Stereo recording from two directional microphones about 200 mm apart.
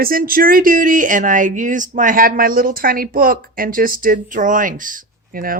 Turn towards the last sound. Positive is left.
turn(degrees=-45)  # may be behind; listen again after turning